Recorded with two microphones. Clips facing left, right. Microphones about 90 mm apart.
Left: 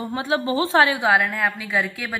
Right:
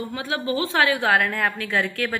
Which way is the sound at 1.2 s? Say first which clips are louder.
Even; 5° left (ahead or behind).